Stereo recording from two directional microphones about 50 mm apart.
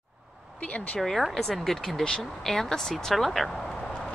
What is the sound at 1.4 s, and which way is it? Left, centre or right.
Speech, centre.